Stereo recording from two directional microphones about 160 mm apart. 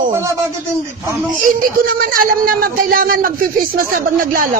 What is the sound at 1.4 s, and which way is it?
Speech, 60° right (ahead or behind).